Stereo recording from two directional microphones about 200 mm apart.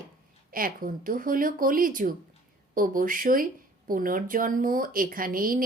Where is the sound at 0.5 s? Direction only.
45° right (ahead or behind).